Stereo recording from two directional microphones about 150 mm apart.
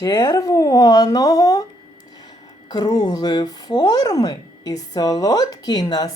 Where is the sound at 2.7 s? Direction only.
25° left (ahead or behind).